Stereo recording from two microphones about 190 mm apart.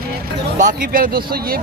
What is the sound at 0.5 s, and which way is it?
Speech, 45° right (ahead or behind).